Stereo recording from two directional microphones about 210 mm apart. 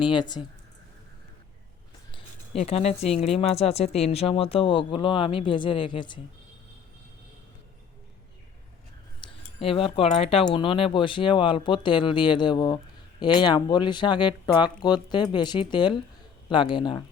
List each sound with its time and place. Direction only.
0.0 s speech: 20° left (ahead or behind)
2.1 s a sound: 30° left (ahead or behind)
3.2 s speech: 30° left (ahead or behind)
9.6 s speech: 25° left (ahead or behind)